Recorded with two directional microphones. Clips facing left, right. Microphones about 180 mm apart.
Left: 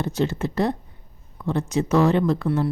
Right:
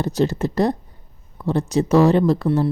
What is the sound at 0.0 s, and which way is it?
Speech, 40° right (ahead or behind).